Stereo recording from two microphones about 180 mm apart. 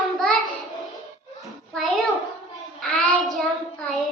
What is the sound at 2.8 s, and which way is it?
Child singing, centre (ahead or behind).